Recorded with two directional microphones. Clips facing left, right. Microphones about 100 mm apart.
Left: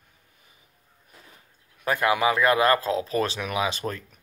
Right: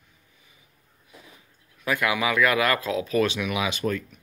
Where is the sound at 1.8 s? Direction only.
35° left (ahead or behind).